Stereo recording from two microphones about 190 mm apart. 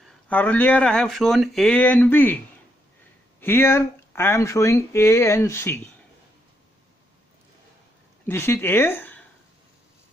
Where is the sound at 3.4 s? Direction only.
10° left (ahead or behind).